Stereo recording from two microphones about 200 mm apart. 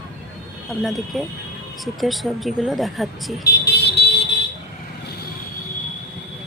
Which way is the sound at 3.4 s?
55° left (ahead or behind).